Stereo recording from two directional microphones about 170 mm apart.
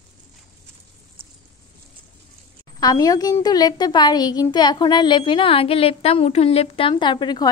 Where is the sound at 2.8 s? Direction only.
20° left (ahead or behind).